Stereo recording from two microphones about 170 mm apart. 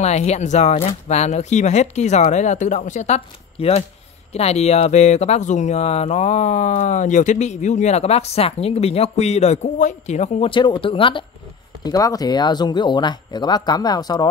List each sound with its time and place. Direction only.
0.0 s speech: 40° left (ahead or behind); by 14.2 s 25° left (ahead or behind)